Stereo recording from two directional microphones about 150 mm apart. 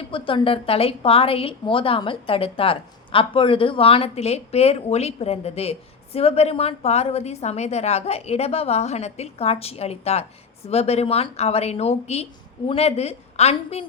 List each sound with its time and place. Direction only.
0.1 s a woman's voice: 35° left (ahead or behind)